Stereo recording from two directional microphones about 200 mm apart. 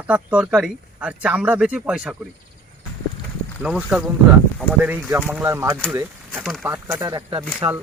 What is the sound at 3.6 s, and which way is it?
Speech, 5° right (ahead or behind).